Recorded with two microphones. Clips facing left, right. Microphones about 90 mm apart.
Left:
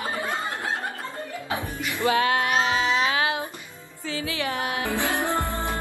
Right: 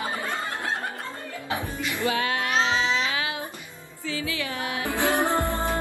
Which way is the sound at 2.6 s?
45° left (ahead or behind).